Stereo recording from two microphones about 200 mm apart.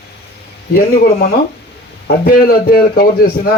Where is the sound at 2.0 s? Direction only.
50° left (ahead or behind).